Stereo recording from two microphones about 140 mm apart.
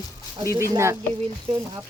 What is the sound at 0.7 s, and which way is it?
Speech, 20° right (ahead or behind).